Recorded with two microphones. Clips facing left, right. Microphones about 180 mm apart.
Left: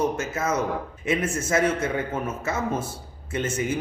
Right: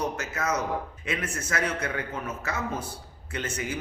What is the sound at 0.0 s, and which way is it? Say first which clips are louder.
A man's voice: left 5 dB; 25° left (ahead or behind).